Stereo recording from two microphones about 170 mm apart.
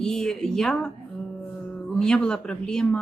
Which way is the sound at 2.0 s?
5° left (ahead or behind).